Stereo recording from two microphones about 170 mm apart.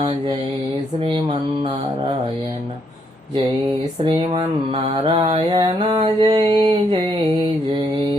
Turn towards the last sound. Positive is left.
turn(degrees=-30)  # may be behind; listen again after turning